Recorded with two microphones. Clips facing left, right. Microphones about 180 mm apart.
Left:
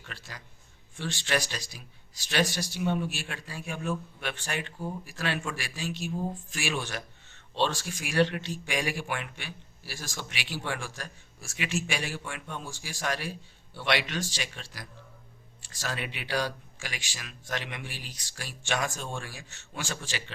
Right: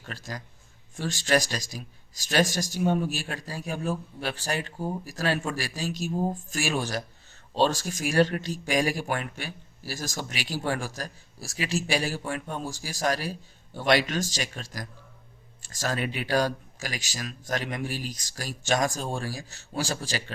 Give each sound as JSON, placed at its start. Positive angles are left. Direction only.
{"t": 0.0, "sound": "speech", "side_deg": -40}